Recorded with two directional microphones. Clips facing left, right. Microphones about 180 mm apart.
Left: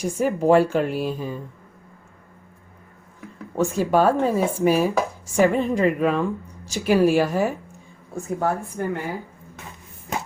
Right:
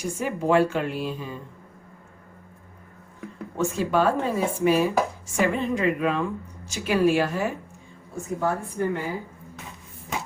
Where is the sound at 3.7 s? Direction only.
40° left (ahead or behind).